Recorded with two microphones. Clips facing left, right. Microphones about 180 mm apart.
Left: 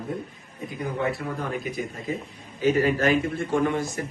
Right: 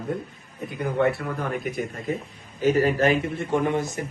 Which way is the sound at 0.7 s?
65° right (ahead or behind).